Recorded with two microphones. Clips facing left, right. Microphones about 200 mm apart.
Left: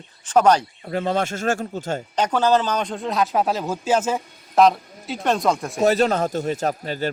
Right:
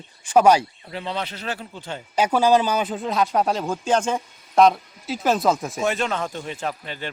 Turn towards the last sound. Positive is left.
turn(degrees=40)  # may be behind; listen again after turning